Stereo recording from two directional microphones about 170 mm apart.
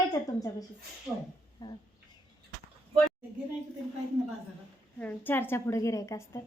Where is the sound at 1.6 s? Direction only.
25° left (ahead or behind).